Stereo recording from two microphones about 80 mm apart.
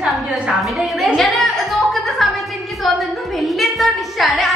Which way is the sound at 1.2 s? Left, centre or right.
Centre.